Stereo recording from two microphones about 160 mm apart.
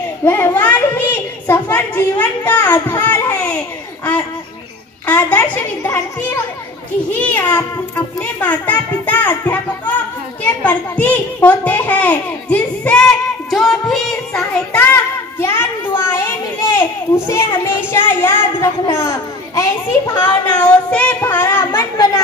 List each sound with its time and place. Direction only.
0.2 s a sound: 15° left (ahead or behind)
7.1 s a child's voice: 10° left (ahead or behind)
13.5 s music: centre (ahead or behind)
15.3 s a child's voice: 15° left (ahead or behind)
21.7 s a child's voice: 25° left (ahead or behind)